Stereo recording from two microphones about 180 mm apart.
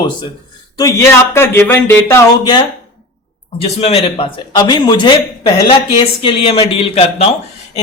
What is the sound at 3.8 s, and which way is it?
Speech, 35° left (ahead or behind).